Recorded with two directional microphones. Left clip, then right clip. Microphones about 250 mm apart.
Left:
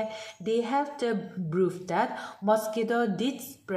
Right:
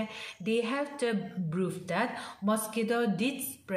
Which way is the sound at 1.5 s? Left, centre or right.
Centre.